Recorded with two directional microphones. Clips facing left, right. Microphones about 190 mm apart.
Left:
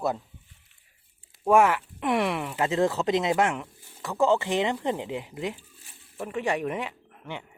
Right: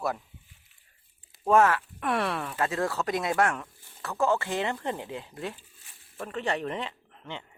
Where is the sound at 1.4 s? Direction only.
10° left (ahead or behind).